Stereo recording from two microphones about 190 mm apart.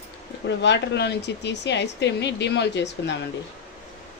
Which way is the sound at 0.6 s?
65° left (ahead or behind).